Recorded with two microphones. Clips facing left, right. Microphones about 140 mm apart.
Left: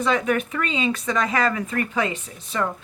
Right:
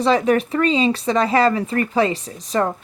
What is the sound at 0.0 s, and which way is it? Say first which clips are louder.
Speech: right 5 dB; 35° right (ahead or behind).